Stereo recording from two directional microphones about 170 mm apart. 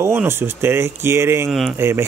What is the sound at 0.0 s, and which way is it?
Speech, 15° right (ahead or behind).